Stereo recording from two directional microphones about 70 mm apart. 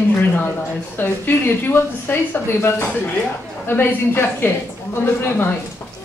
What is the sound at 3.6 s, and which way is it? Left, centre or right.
Speech, left.